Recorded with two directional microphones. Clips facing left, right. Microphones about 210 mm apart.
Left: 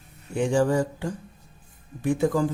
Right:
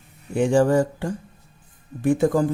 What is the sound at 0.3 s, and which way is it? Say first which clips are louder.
Speech: right 4 dB; 50° right (ahead or behind).